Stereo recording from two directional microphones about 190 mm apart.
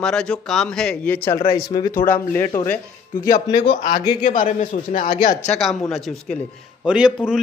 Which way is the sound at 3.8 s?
20° left (ahead or behind).